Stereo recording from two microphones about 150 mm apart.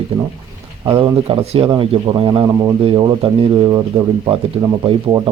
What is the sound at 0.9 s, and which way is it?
Speech, 35° right (ahead or behind).